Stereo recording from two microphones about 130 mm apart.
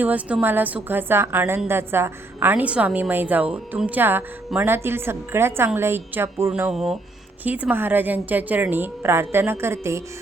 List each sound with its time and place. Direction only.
0.0 s a woman's voice: 10° right (ahead or behind)
6.7 s a woman's voice: 5° right (ahead or behind); by 10.0 s 20° right (ahead or behind)